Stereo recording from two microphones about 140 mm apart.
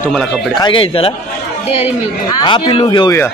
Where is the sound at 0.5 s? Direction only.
35° left (ahead or behind).